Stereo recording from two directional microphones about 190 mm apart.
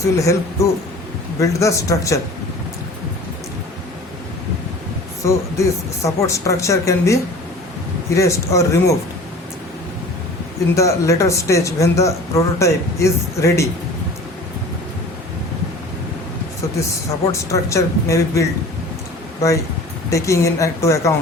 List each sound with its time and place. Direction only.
0.2 s speech: 15° left (ahead or behind)
5.2 s speech: 15° left (ahead or behind)
10.8 s speech: 15° left (ahead or behind)
17.5 s speech: 15° left (ahead or behind)